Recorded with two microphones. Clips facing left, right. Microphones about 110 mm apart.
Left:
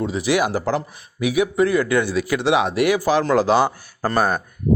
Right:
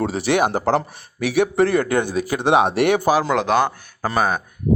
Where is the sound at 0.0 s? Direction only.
65° right (ahead or behind).